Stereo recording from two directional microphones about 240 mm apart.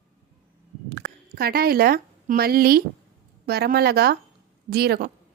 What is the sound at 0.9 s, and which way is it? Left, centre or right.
A woman's voice, right.